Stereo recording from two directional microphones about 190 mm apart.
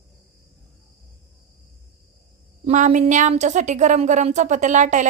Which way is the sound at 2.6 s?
40° right (ahead or behind).